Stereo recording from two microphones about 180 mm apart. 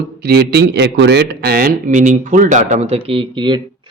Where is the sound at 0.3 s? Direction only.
65° right (ahead or behind).